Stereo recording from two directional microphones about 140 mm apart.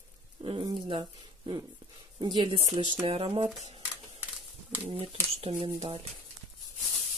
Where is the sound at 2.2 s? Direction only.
30° right (ahead or behind).